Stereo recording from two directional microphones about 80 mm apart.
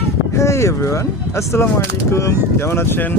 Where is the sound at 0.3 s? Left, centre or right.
Left.